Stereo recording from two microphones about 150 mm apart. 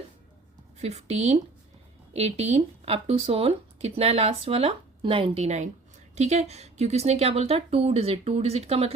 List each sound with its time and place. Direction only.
0.8 s speech: 45° right (ahead or behind)